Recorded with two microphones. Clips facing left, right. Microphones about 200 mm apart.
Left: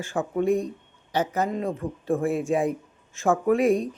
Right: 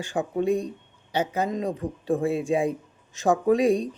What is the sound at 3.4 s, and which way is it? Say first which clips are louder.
Speech: even; 30° right (ahead or behind).